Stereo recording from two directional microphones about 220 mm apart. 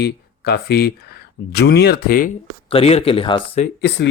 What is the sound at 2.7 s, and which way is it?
Speech, 25° left (ahead or behind).